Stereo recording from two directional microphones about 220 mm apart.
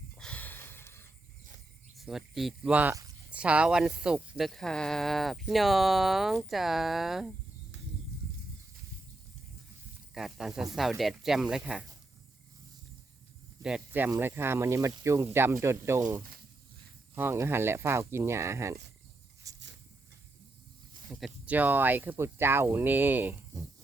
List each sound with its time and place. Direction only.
0.2 s a sound: 5° left (ahead or behind)
2.0 s speech: centre (ahead or behind)
10.2 s speech: centre (ahead or behind)
13.6 s speech: 5° right (ahead or behind)
19.4 s a sound: 15° right (ahead or behind)
21.1 s speech: centre (ahead or behind)